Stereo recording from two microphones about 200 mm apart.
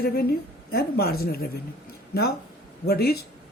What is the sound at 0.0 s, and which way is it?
Speech, 50° left (ahead or behind).